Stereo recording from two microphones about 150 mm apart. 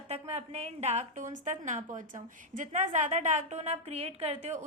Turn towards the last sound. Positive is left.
turn(degrees=-45)  # may be behind; listen again after turning